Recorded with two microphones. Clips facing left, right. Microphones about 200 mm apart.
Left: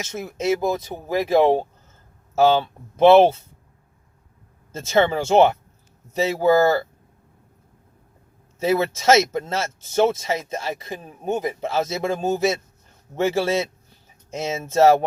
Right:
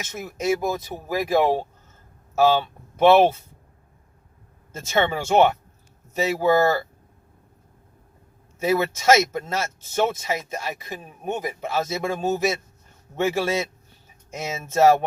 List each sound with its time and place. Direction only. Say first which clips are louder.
0.0 s speech: left 2 dB; 25° left (ahead or behind)
4.7 s speech: left 4 dB; 25° left (ahead or behind)
8.6 s speech: left 1 dB; 25° left (ahead or behind)